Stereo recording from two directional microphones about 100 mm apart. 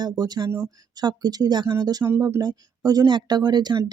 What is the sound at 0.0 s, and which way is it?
Speech, 45° right (ahead or behind).